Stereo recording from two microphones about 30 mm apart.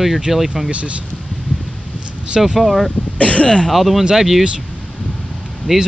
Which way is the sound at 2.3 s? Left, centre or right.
Centre.